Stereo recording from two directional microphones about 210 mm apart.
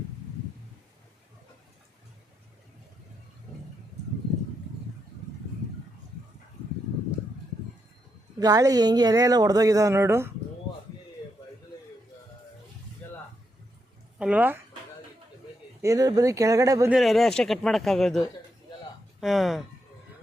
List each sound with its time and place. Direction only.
8.4 s a woman's voice: 15° right (ahead or behind)
14.2 s speech: 5° right (ahead or behind)
15.8 s a woman's voice: 15° right (ahead or behind)
16.9 s a man's voice: centre (ahead or behind)
19.2 s a man's voice: centre (ahead or behind)